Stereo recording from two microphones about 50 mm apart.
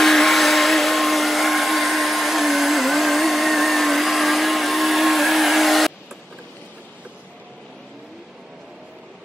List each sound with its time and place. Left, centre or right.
0.0 s vacuum cleaner: centre